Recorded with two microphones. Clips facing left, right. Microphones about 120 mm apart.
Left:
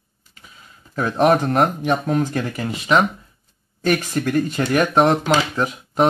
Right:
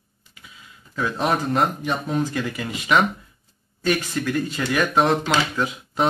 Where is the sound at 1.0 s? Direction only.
50° left (ahead or behind).